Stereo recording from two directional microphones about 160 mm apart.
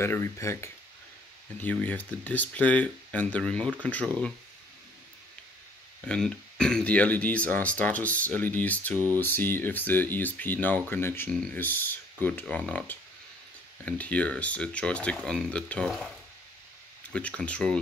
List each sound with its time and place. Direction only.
0.0 s speech: 15° left (ahead or behind)
5.9 s speech: 5° left (ahead or behind)
17.1 s speech: 5° left (ahead or behind)